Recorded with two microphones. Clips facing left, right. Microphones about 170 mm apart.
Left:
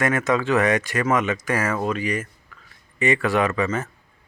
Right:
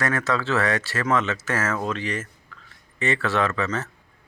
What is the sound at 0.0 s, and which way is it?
Speech, 20° left (ahead or behind).